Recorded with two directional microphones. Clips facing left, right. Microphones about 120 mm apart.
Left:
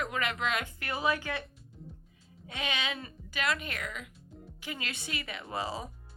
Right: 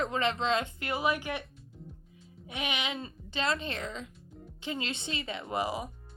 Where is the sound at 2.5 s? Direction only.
15° right (ahead or behind).